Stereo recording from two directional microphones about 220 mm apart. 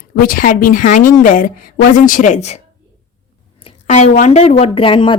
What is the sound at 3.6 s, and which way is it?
A woman's voice, 30° left (ahead or behind).